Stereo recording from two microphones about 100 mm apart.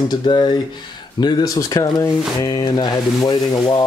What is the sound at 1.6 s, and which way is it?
Speech, 35° left (ahead or behind).